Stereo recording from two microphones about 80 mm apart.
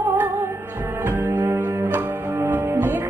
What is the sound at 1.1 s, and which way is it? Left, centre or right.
Music, right.